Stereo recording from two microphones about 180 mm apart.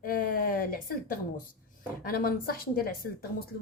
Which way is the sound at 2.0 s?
55° left (ahead or behind).